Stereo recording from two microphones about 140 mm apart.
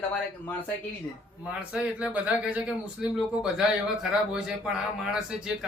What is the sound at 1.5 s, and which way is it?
A man's voice, 10° right (ahead or behind).